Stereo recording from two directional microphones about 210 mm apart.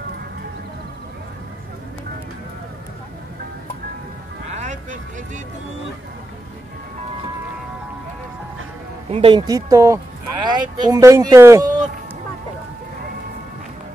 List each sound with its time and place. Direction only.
9.1 s speech: 25° right (ahead or behind)